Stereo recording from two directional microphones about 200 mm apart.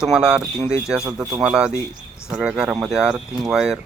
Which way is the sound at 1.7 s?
15° left (ahead or behind).